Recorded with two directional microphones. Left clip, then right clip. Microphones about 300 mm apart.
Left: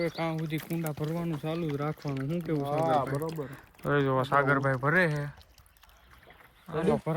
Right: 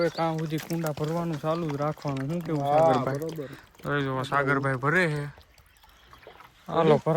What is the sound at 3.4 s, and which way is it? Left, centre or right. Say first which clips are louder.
Speech: even; centre.